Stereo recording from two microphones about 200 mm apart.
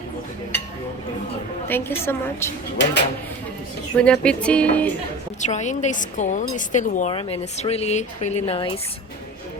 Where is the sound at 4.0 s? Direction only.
5° left (ahead or behind).